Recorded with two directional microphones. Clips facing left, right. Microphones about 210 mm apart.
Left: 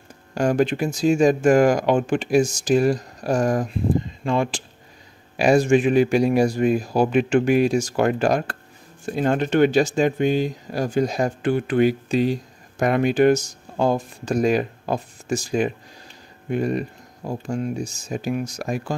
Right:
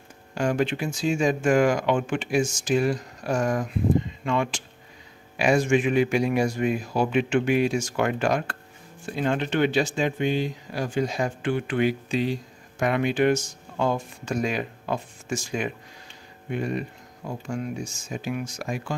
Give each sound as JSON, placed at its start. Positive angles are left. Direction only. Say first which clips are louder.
{"t": 0.3, "sound": "speech", "louder": "left 5 dB", "side_deg": 40}